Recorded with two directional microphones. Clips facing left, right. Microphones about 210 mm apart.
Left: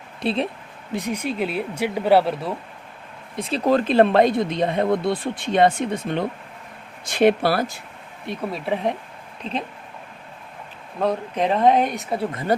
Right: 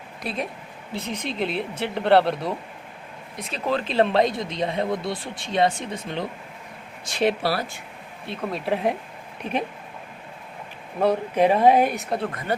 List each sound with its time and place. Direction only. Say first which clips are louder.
0.2 s speech: left 7 dB; 30° left (ahead or behind)
0.9 s speech: left 4 dB; 10° left (ahead or behind)
3.3 s speech: left 7 dB; 30° left (ahead or behind); by 7.8 s 50° left (ahead or behind)
8.5 s speech: right 1 dB; centre (ahead or behind)
9.4 s speech: right 2 dB; 15° right (ahead or behind)
11.0 s speech: right 3 dB; 10° right (ahead or behind)
12.5 s speech: left 5 dB; 40° left (ahead or behind)